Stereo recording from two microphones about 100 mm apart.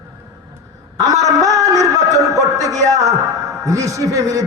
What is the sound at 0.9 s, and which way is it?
A man's voice, 35° right (ahead or behind).